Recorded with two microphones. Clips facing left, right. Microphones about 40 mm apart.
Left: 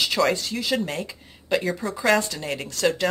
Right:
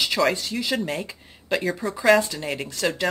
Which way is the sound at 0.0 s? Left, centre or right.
Centre.